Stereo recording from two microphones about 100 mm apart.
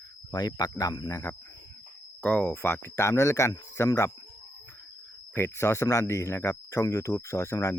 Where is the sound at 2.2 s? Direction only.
15° left (ahead or behind); by 4.1 s 30° left (ahead or behind).